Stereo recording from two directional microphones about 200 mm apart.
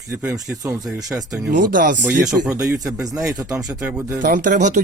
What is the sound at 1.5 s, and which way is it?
Speech, 40° right (ahead or behind).